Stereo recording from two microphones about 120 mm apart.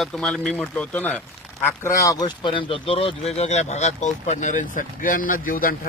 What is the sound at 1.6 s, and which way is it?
Speech, 25° left (ahead or behind).